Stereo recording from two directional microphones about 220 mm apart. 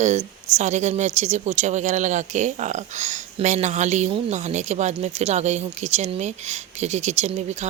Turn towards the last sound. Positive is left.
turn(degrees=-30)  # may be behind; listen again after turning